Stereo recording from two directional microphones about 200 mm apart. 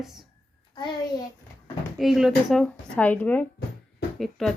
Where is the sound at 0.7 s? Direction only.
20° left (ahead or behind).